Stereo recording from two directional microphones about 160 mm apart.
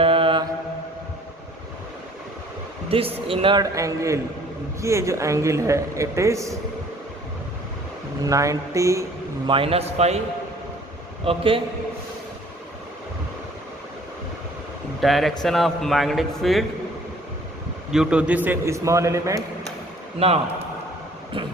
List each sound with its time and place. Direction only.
0.0 s mantra: 35° right (ahead or behind)
2.9 s a man's voice: 35° right (ahead or behind); by 6.6 s 20° right (ahead or behind)
8.2 s speech: 20° right (ahead or behind)
9.5 s a man's voice: 35° right (ahead or behind)
11.3 s a man's voice: 35° right (ahead or behind)
15.0 s a man's voice: centre (ahead or behind)
17.9 s a man's voice: 5° right (ahead or behind)
20.1 s a man's voice: 40° right (ahead or behind)